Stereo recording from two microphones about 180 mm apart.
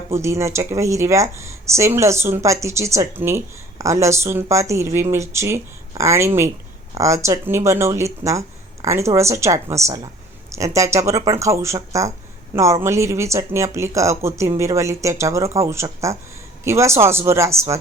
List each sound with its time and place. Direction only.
0.1 s speech: 15° right (ahead or behind)